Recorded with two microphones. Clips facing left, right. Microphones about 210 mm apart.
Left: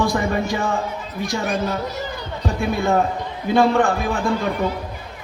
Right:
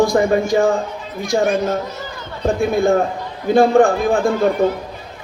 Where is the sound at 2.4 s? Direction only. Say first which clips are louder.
Right 6 dB; 50° right (ahead or behind).